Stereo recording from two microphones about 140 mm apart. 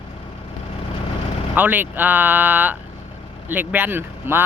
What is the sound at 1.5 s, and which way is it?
Speech, 10° right (ahead or behind).